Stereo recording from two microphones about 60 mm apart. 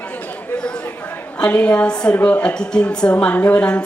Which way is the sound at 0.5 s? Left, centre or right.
Centre.